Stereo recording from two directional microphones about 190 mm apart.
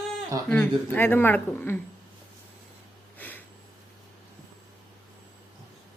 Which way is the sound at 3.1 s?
10° left (ahead or behind).